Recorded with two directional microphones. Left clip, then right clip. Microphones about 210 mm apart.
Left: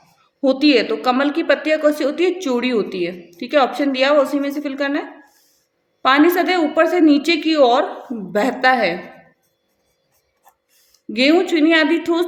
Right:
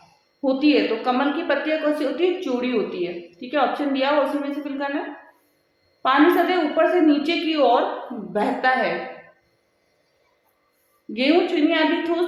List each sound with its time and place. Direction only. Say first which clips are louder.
0.4 s a woman's voice: left 4 dB; 45° left (ahead or behind)
11.1 s a woman's voice: left 4 dB; 45° left (ahead or behind)